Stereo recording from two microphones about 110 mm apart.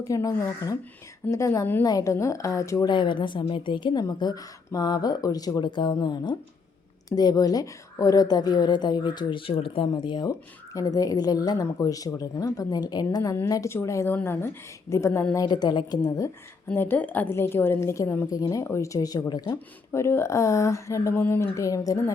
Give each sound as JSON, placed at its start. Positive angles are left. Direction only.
{"t": 0.0, "sound": "a woman's voice", "side_deg": 30}
{"t": 2.9, "sound": "a woman's voice", "side_deg": 45}
{"t": 10.8, "sound": "a woman's voice", "side_deg": 35}
{"t": 15.4, "sound": "a woman's voice", "side_deg": 40}
{"t": 16.6, "sound": "a woman's voice", "side_deg": 20}
{"t": 19.9, "sound": "a woman's voice", "side_deg": 25}